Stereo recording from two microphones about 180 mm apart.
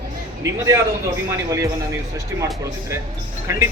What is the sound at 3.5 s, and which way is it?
Speech, 20° right (ahead or behind).